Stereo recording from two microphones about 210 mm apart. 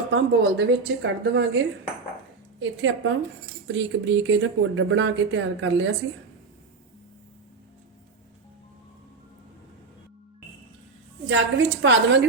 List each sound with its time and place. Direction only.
0.1 s speech: 55° right (ahead or behind)
11.3 s speech: 60° right (ahead or behind)